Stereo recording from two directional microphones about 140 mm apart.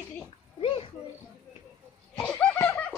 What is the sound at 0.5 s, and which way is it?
Children playing, 40° left (ahead or behind).